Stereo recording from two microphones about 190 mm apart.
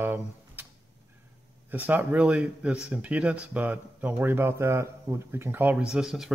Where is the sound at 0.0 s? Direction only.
10° right (ahead or behind).